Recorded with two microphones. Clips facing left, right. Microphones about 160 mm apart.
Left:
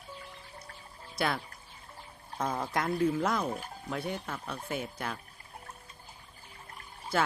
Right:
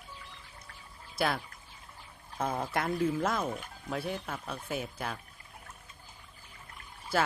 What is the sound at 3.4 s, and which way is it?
Speech, 35° left (ahead or behind).